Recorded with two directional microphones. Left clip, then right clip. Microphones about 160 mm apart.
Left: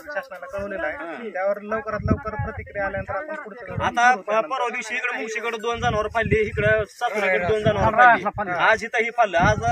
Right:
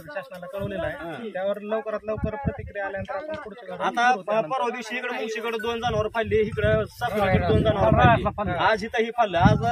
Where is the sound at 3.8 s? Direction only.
25° left (ahead or behind).